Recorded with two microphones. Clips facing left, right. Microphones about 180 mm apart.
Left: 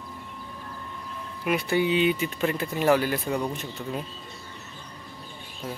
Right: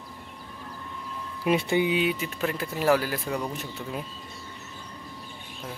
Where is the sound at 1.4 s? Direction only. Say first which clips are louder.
Right 2 dB; 25° right (ahead or behind).